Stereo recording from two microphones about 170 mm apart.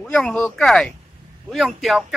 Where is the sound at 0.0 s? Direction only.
5° left (ahead or behind).